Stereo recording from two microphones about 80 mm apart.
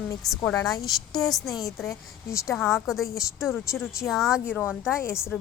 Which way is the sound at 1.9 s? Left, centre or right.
Left.